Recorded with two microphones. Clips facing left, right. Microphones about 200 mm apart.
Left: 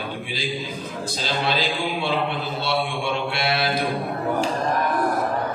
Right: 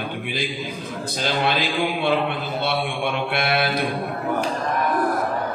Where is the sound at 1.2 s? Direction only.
55° right (ahead or behind).